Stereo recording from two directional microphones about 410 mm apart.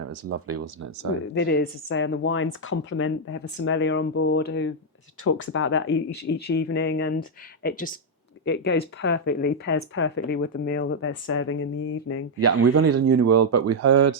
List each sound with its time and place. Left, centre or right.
0.1 s speech: right
1.2 s speech: left
12.4 s speech: right